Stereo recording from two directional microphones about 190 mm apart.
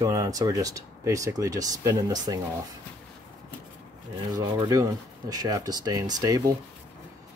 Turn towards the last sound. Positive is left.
turn(degrees=-20)  # may be behind; listen again after turning